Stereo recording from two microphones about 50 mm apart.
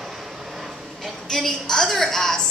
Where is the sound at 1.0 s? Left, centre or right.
Centre.